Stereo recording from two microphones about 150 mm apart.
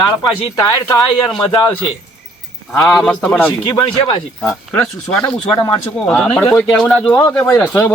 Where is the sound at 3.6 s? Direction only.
30° left (ahead or behind).